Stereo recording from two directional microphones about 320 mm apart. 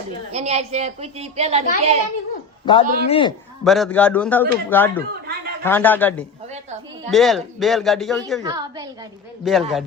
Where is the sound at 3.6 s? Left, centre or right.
Centre.